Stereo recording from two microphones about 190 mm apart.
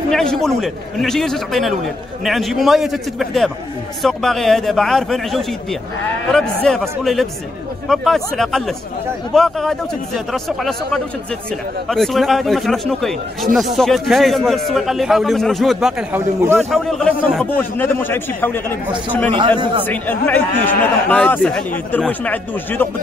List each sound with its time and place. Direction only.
0.1 s speech: 5° left (ahead or behind)
16.5 s a man's voice: centre (ahead or behind)
19.3 s speech: 25° right (ahead or behind)
19.9 s a man's voice: 10° left (ahead or behind)